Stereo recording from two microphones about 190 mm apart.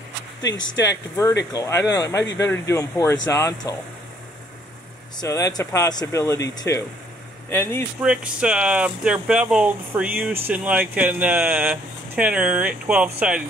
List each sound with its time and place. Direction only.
0.4 s speech: 70° left (ahead or behind)
1.5 s speech: 15° left (ahead or behind)
5.2 s speech: 20° left (ahead or behind)
8.0 s speech: 5° right (ahead or behind)